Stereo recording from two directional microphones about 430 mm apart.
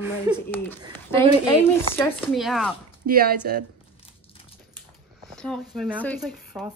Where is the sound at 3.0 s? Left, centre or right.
Centre.